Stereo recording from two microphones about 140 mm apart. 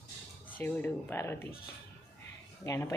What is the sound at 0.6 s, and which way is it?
Speech, 15° left (ahead or behind).